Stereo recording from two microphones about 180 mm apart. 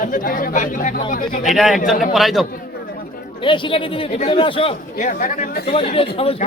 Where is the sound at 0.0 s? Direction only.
45° left (ahead or behind).